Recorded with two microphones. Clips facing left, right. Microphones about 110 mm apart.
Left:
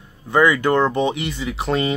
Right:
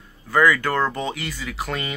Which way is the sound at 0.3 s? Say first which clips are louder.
Left 3 dB; 20° left (ahead or behind).